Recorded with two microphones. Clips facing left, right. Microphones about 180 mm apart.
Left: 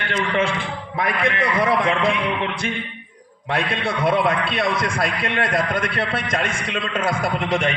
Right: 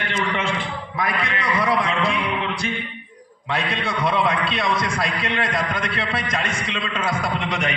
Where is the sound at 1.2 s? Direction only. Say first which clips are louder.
Left 6 dB; 55° left (ahead or behind).